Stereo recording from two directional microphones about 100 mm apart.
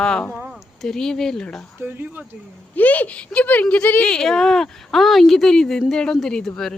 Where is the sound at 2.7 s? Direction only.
15° left (ahead or behind).